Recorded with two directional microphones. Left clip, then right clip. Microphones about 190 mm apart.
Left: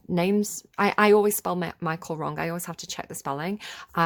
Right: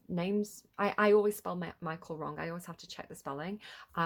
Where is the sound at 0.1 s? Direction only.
45° left (ahead or behind).